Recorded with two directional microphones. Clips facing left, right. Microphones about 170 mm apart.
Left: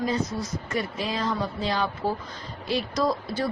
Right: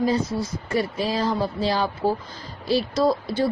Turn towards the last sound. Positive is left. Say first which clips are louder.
# right 5 dB
turn(degrees=-30)  # may be behind; listen again after turning